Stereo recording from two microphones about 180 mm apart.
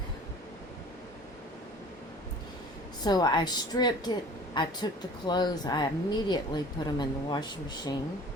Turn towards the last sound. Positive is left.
turn(degrees=25)  # may be behind; listen again after turning